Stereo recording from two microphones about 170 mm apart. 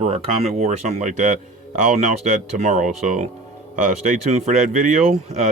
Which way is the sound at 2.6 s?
45° right (ahead or behind).